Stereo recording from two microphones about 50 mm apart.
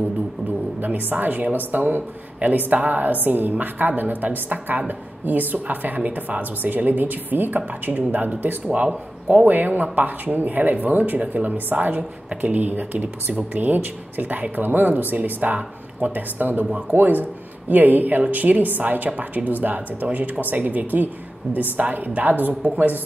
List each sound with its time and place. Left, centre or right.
0.7 s a woman's voice: right
8.6 s speech: right
9.5 s a woman's voice: right
13.3 s speech: right
13.6 s a woman's voice: right